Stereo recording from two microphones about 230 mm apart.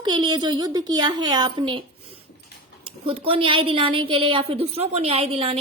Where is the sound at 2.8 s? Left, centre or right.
Right.